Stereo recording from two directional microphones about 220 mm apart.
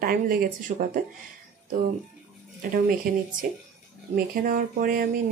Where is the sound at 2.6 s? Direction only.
40° right (ahead or behind).